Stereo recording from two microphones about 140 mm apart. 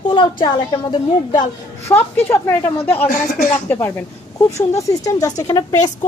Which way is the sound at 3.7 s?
15° left (ahead or behind).